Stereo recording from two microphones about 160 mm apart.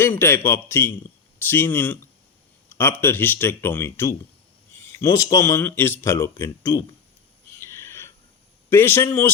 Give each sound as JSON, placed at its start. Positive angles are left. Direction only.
{"t": 0.0, "sound": "speech", "side_deg": 15}
{"t": 7.6, "sound": "a sound", "side_deg": 15}
{"t": 8.7, "sound": "speech", "side_deg": 15}